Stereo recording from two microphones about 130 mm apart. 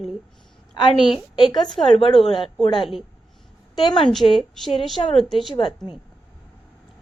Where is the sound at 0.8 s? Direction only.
40° left (ahead or behind).